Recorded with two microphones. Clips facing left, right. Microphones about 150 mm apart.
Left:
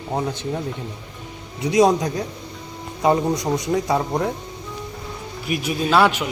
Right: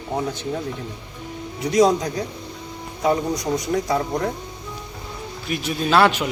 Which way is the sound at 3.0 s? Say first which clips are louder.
Left 2 dB; 60° left (ahead or behind).